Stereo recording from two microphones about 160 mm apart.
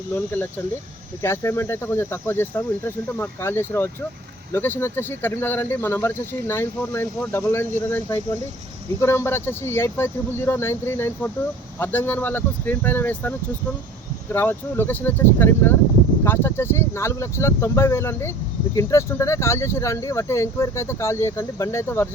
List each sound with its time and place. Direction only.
1.2 s speech: 15° left (ahead or behind)
14.3 s speech: 15° left (ahead or behind)